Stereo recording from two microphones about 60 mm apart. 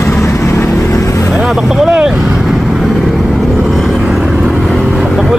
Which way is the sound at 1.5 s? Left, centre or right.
Centre.